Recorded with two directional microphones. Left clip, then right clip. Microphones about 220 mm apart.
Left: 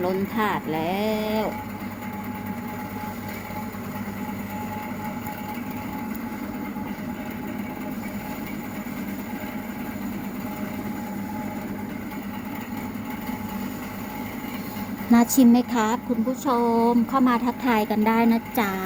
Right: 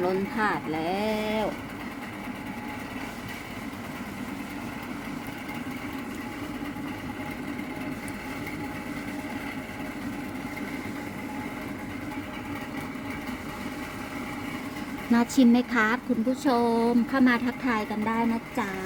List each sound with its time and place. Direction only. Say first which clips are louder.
0.0 s speech: left 2 dB; 5° left (ahead or behind)
15.1 s speech: left 4 dB; 5° left (ahead or behind)
16.4 s speech: left 3 dB; 15° right (ahead or behind)
17.7 s a woman's voice: left 7 dB; 15° left (ahead or behind)